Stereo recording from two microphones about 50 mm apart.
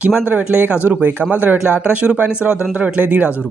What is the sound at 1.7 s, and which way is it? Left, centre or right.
Speech, right.